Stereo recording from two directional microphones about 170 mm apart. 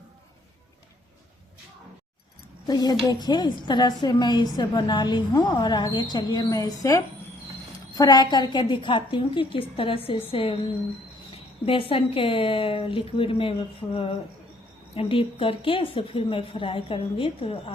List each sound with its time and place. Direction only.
2.6 s a woman's voice: 25° left (ahead or behind)
11.6 s a woman's voice: 30° left (ahead or behind)